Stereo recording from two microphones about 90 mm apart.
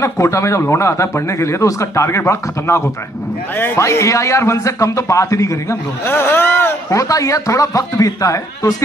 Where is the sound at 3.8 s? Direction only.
35° left (ahead or behind).